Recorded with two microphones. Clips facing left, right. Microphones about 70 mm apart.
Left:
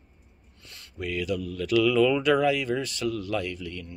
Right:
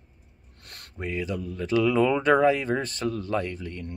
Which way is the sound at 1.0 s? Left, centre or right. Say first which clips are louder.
Left 1 dB; right.